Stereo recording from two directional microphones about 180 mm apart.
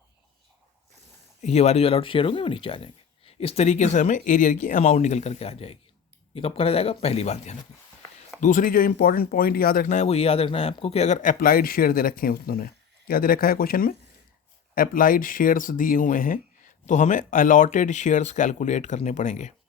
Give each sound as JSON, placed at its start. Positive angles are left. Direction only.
{"t": 1.4, "sound": "speech", "side_deg": 35}
{"t": 8.4, "sound": "speech", "side_deg": 45}